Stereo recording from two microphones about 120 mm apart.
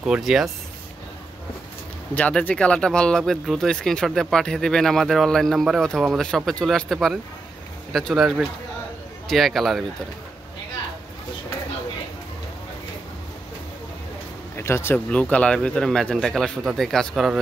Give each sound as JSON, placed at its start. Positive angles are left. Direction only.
{"t": 0.0, "sound": "speech", "side_deg": -5}
{"t": 2.1, "sound": "speech", "side_deg": 10}
{"t": 14.6, "sound": "speech", "side_deg": 20}
{"t": 15.0, "sound": "speech", "side_deg": 10}